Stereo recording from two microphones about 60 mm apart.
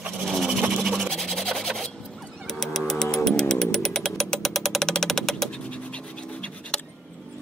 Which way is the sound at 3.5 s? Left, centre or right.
Centre.